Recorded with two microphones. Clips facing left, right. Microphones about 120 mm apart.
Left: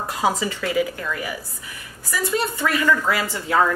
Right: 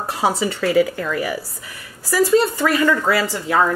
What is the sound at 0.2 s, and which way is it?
Speech, 35° right (ahead or behind).